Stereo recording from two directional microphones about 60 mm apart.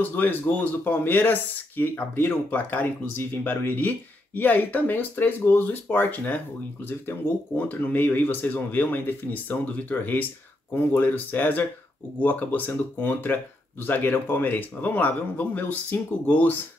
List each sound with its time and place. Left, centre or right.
0.0 s speech: left